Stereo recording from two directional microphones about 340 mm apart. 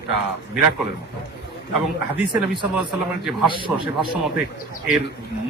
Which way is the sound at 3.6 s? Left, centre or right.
Centre.